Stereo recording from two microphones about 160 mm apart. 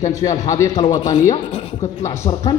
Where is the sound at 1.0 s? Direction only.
40° left (ahead or behind).